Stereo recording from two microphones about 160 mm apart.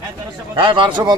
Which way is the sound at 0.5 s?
30° right (ahead or behind).